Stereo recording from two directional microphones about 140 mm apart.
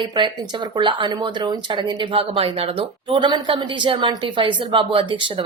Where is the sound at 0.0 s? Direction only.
30° right (ahead or behind).